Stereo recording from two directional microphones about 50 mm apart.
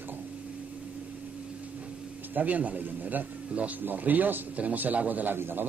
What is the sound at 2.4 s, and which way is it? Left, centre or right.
A man's voice, right.